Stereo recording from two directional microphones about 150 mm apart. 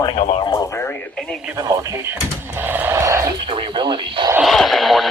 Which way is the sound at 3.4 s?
35° right (ahead or behind).